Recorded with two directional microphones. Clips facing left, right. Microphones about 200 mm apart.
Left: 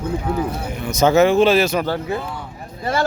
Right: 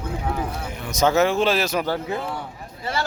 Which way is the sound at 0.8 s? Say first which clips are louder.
Left 5 dB; centre (ahead or behind).